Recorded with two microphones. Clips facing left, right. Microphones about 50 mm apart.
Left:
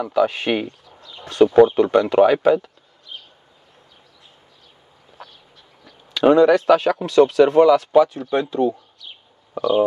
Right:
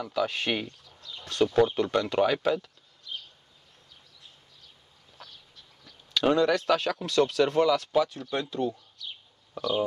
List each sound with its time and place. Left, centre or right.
0.0 s speech: centre
5.2 s a sound: centre
5.9 s speech: centre